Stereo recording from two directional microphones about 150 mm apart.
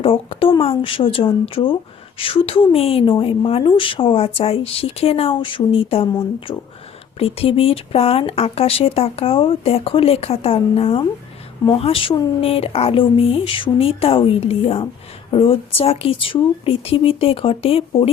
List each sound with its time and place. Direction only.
0.0 s speech: 40° left (ahead or behind)